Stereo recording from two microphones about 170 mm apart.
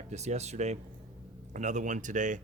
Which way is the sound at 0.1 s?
40° right (ahead or behind).